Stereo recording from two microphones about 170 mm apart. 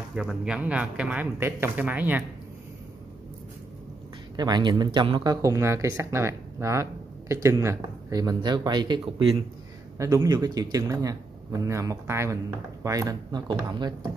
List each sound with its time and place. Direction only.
0.1 s speech: 5° right (ahead or behind)
4.4 s speech: 25° right (ahead or behind)